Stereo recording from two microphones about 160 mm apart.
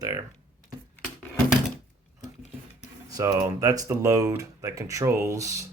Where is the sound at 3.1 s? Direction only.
20° right (ahead or behind).